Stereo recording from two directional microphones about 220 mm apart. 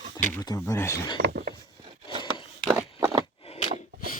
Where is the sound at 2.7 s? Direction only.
15° right (ahead or behind).